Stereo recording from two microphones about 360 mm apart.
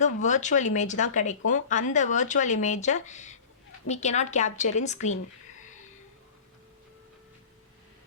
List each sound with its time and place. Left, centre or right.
0.0 s speech: centre